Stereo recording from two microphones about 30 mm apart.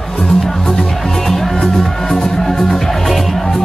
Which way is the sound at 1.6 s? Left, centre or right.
Left.